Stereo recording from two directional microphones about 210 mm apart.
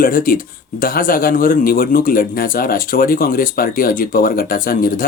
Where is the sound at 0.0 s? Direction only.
45° left (ahead or behind).